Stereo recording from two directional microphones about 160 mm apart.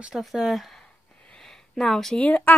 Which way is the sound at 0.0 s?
Centre (ahead or behind).